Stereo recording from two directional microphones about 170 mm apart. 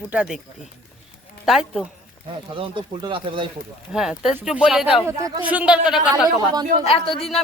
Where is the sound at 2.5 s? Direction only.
30° right (ahead or behind).